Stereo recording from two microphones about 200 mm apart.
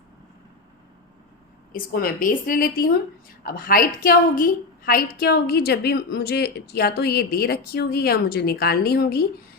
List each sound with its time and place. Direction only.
1.7 s a woman's voice: 45° left (ahead or behind)